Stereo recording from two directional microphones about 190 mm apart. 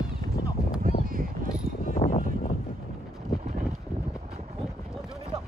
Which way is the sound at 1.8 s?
40° left (ahead or behind).